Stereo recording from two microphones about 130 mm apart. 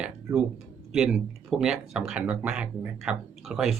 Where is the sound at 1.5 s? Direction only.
5° right (ahead or behind).